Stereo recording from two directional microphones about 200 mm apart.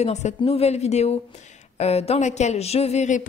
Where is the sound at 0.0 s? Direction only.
35° left (ahead or behind).